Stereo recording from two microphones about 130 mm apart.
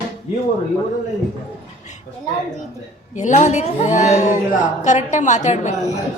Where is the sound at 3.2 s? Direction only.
65° left (ahead or behind).